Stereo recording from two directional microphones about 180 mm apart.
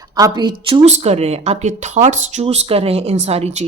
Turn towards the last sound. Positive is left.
turn(degrees=-35)  # may be behind; listen again after turning